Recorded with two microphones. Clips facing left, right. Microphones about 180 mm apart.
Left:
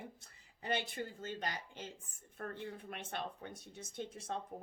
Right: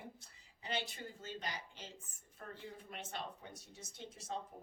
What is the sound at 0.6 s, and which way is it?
Speech, 50° left (ahead or behind).